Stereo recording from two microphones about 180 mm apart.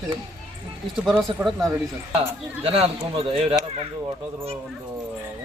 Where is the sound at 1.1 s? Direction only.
Centre (ahead or behind).